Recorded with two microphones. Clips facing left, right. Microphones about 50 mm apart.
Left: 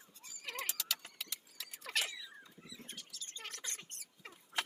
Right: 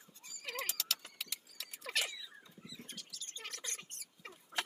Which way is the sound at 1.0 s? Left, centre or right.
Centre.